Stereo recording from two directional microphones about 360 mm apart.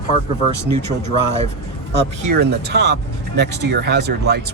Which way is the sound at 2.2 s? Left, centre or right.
Right.